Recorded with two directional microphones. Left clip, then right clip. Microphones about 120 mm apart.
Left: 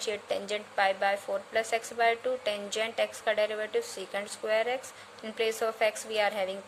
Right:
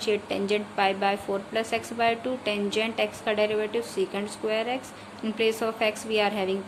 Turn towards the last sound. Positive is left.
turn(degrees=55)  # may be behind; listen again after turning